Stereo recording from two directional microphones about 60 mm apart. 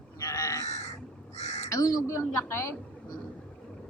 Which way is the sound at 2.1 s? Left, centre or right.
Left.